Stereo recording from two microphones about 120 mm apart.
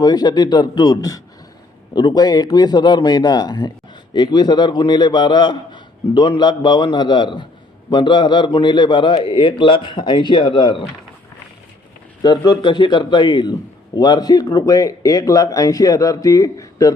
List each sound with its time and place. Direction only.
0.0 s a man's voice: 35° left (ahead or behind)
12.5 s a man's voice: 40° left (ahead or behind)